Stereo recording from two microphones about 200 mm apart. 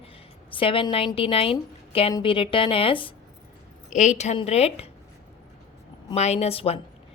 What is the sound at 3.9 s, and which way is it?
Speech, 35° left (ahead or behind).